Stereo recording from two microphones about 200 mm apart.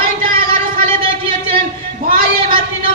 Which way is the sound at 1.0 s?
25° right (ahead or behind).